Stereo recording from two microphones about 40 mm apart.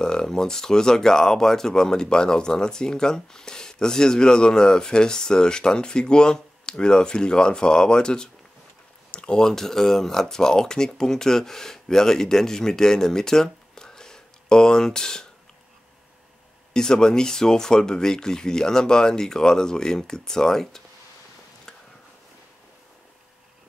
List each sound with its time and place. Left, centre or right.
0.0 s speech: centre
9.1 s a sound: left
9.4 s speech: centre
16.7 s speech: centre